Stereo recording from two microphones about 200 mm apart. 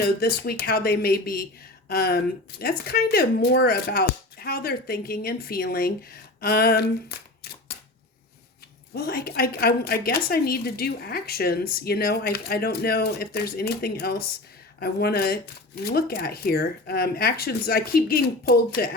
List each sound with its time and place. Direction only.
0.0 s a woman's voice: 50° left (ahead or behind)
8.9 s a woman's voice: 50° left (ahead or behind)